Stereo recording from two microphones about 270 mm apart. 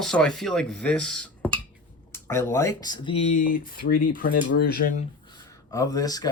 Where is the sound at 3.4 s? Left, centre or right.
Left.